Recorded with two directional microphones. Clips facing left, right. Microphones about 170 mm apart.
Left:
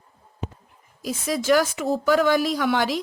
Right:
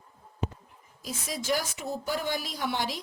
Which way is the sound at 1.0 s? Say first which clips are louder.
Left 10 dB; 85° left.